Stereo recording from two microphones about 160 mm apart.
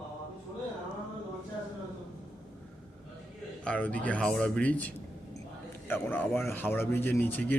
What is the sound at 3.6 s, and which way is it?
A man's voice, 10° left (ahead or behind).